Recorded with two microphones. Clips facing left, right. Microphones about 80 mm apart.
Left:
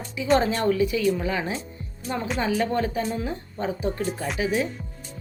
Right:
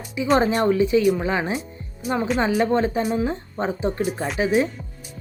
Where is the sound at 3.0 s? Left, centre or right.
Centre.